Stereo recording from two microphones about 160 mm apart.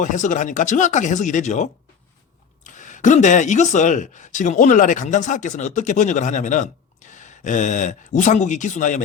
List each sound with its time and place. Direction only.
0.0 s speech: 50° left (ahead or behind)